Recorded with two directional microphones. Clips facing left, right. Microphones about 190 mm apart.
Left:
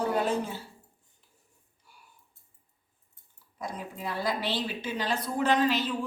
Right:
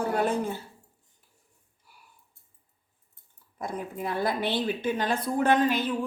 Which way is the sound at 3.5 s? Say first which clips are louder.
Right 4 dB; 55° right (ahead or behind).